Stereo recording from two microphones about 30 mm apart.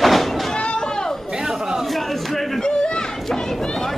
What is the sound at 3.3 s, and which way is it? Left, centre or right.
Chatter, centre.